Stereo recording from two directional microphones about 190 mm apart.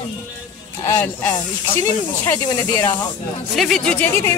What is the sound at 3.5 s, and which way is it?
Speech, centre (ahead or behind).